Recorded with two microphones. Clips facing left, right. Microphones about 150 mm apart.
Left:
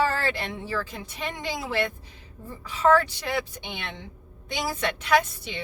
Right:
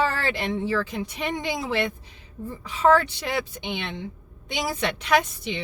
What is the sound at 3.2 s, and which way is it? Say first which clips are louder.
A woman's voice: right 2 dB; 20° right (ahead or behind).